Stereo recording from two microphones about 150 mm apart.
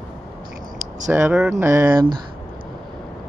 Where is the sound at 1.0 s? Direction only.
15° right (ahead or behind).